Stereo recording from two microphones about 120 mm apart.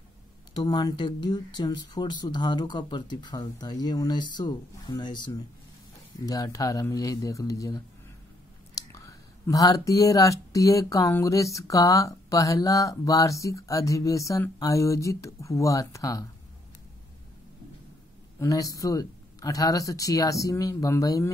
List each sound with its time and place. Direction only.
0.6 s speech: 35° left (ahead or behind)
18.4 s speech: 30° left (ahead or behind)